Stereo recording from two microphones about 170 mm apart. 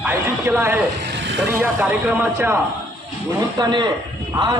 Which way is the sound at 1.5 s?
10° right (ahead or behind).